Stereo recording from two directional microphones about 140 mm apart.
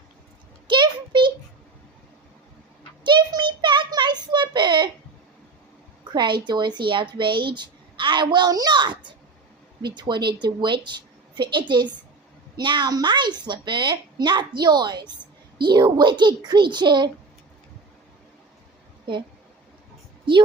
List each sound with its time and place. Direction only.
0.7 s a sound: 35° right (ahead or behind)
3.0 s child singing: 35° right (ahead or behind)
6.1 s a woman's voice: 35° right (ahead or behind)